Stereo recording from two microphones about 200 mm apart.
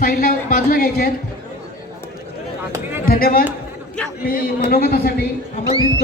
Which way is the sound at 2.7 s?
10° right (ahead or behind).